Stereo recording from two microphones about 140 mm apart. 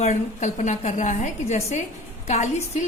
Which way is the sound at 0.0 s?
60° left (ahead or behind).